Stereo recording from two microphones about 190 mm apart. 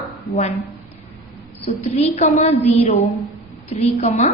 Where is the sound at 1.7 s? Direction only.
40° left (ahead or behind).